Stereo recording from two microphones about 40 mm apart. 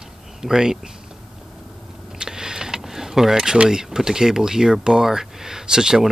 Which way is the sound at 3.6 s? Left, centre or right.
Centre.